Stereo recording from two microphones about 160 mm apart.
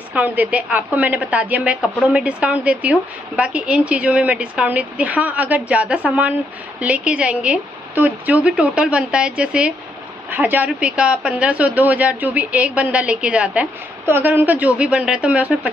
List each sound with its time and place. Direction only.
0.1 s a woman's voice: 10° right (ahead or behind)